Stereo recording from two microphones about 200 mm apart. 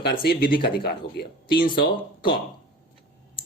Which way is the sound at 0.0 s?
50° left (ahead or behind).